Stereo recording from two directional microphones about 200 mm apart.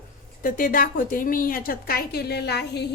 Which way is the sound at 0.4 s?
45° left (ahead or behind).